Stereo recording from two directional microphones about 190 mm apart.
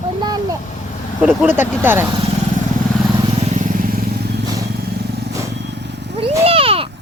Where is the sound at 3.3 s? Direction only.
35° right (ahead or behind); by 6.1 s 65° right (ahead or behind).